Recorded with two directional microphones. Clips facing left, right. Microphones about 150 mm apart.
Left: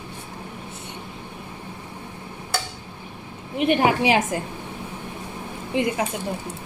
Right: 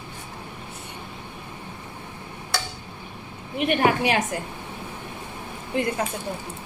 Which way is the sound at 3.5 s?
30° left (ahead or behind).